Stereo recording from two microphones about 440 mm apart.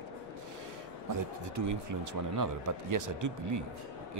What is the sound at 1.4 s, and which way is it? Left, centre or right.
Speech, right.